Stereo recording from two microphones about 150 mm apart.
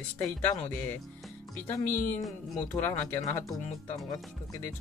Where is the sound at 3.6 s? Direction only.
50° left (ahead or behind).